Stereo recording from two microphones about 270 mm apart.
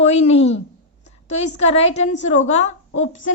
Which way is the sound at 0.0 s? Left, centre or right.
Left.